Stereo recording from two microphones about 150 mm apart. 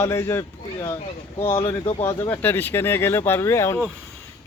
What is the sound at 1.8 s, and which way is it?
Speech, 40° left (ahead or behind).